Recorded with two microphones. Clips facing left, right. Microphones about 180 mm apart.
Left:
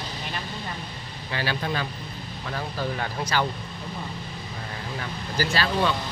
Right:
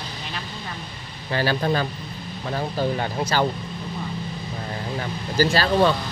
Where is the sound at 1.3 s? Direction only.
40° right (ahead or behind).